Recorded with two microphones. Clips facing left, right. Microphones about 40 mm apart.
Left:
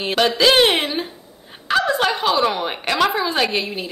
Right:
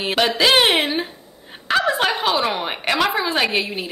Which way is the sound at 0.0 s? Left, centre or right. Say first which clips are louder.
Left 1 dB; centre.